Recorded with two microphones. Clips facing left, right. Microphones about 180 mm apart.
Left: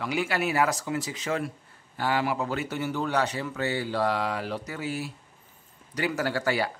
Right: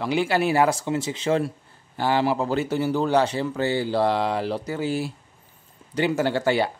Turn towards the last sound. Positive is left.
turn(degrees=-25)  # may be behind; listen again after turning